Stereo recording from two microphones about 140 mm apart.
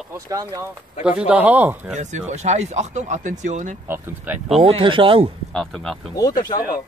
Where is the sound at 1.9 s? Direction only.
55° right (ahead or behind).